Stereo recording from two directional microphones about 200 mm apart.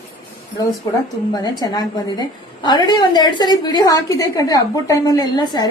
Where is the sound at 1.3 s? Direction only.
20° left (ahead or behind).